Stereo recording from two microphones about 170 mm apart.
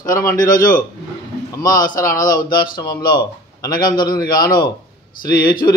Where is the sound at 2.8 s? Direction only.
25° left (ahead or behind).